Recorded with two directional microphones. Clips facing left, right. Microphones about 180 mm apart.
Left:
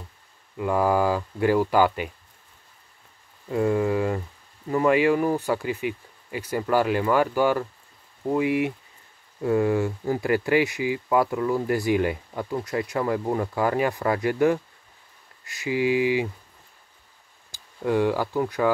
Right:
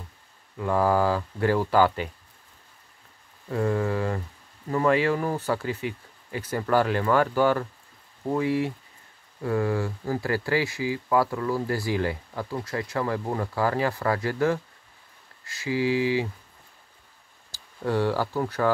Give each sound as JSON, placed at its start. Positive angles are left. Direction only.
{"t": 0.6, "sound": "speech", "side_deg": 10}
{"t": 3.4, "sound": "speech", "side_deg": 10}
{"t": 17.5, "sound": "speech", "side_deg": 15}